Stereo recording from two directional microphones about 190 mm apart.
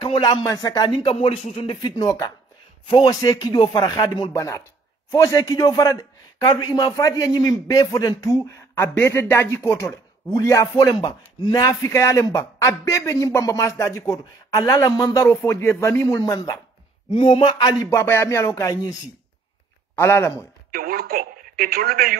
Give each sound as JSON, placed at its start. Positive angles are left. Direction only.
{"t": 0.0, "sound": "speech", "side_deg": 25}
{"t": 17.8, "sound": "speech", "side_deg": 15}
{"t": 20.0, "sound": "speech", "side_deg": 15}
{"t": 20.7, "sound": "speech", "side_deg": -50}